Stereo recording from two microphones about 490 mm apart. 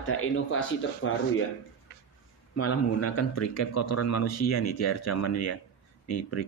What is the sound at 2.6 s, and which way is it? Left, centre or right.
Speech, left.